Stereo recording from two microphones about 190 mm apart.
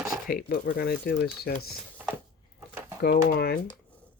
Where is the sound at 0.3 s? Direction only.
55° left (ahead or behind).